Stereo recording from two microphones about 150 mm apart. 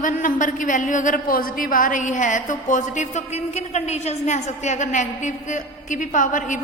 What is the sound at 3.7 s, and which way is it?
A woman's voice, 50° left (ahead or behind).